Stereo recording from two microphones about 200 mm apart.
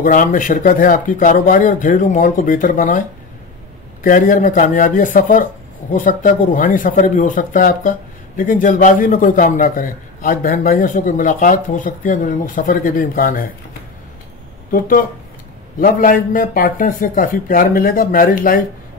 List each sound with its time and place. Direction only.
0.0 s a man's voice: 40° left (ahead or behind)
4.0 s a man's voice: 40° left (ahead or behind)
14.7 s a man's voice: 45° left (ahead or behind)